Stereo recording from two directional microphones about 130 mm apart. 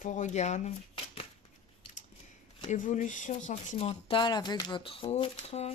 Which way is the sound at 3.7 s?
50° left (ahead or behind).